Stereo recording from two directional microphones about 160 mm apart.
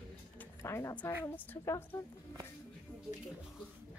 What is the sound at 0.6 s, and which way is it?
A woman's voice, 20° left (ahead or behind).